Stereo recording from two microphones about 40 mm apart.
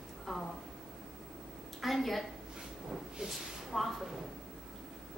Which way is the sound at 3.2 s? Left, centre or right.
Centre.